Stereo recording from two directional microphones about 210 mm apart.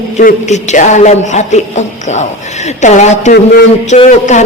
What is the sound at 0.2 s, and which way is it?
A man's voice, 35° left (ahead or behind).